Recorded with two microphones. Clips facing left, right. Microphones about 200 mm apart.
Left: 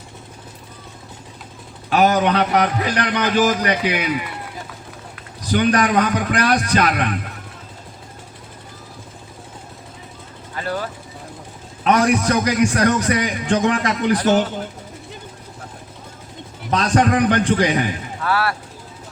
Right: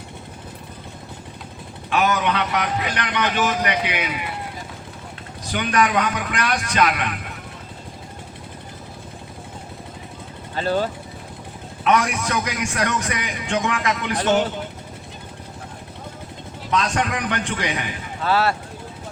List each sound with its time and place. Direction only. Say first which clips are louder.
1.9 s a man's voice: left 5 dB; 35° left (ahead or behind)
5.5 s a man's voice: left 4 dB; 35° left (ahead or behind)
10.5 s speech: right 4 dB; 25° right (ahead or behind)
11.8 s a man's voice: left 4 dB; 35° left (ahead or behind)
16.7 s a man's voice: left 6 dB; 35° left (ahead or behind)
18.2 s speech: right 2 dB; 25° right (ahead or behind)